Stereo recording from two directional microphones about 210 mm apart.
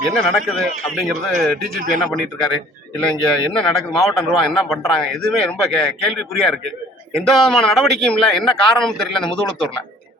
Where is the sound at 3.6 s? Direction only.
Centre (ahead or behind).